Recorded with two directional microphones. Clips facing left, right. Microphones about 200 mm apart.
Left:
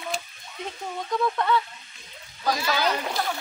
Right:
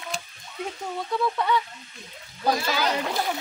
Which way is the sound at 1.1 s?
5° right (ahead or behind).